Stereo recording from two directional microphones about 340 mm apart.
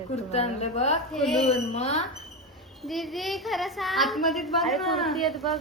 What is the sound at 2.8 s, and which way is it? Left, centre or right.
A woman's voice, centre.